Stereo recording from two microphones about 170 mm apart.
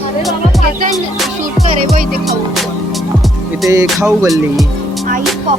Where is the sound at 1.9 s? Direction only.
55° right (ahead or behind).